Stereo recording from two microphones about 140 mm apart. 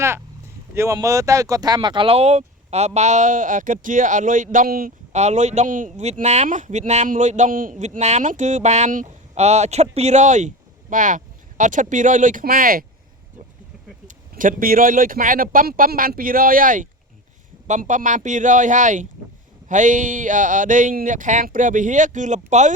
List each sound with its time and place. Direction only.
0.9 s a man's voice: 20° right (ahead or behind); by 4.9 s 90° right
5.1 s a man's voice: 55° right (ahead or behind); by 12.8 s 90° right
14.3 s a man's voice: 80° right; by 22.7 s 55° right (ahead or behind)